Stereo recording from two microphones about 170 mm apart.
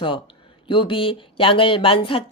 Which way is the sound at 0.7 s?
30° left (ahead or behind).